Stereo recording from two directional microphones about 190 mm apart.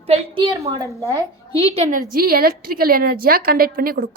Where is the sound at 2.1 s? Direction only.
50° right (ahead or behind).